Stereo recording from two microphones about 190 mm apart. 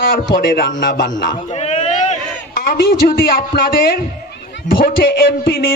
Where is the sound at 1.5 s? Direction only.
35° left (ahead or behind).